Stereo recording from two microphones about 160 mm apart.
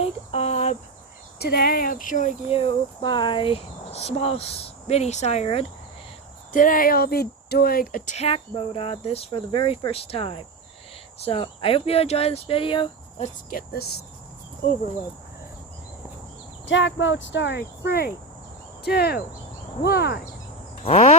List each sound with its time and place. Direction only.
0.0 s cricket: 40° left (ahead or behind)
1.4 s speech: 80° left; by 2.3 s 55° left (ahead or behind)
2.5 s speech: 35° left (ahead or behind)
6.5 s speech: 55° left (ahead or behind); by 13.2 s 30° left (ahead or behind)
13.2 s speech: 60° left (ahead or behind); by 14.0 s 80° left
17.4 s speech: 85° left
20.8 s speech: 40° left (ahead or behind)